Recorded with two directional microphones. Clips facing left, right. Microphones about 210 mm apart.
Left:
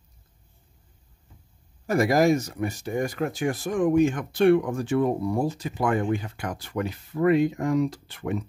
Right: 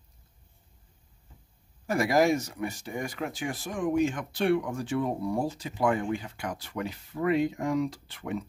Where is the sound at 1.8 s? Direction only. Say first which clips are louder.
Left 4 dB; 40° left (ahead or behind).